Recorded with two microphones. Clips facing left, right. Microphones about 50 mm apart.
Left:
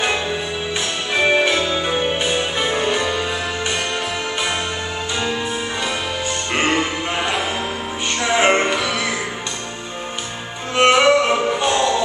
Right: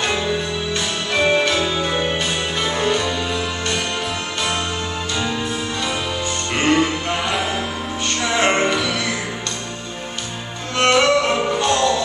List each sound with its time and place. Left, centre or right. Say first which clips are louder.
0.7 s music: left 1 dB; centre
6.2 s music: right 1 dB; centre
8.5 s music: left 1 dB; centre
10.8 s music: left 2 dB; centre